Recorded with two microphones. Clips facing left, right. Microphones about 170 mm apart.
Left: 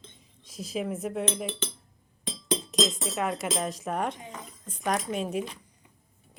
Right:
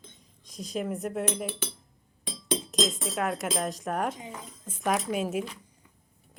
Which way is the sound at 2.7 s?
Centre (ahead or behind).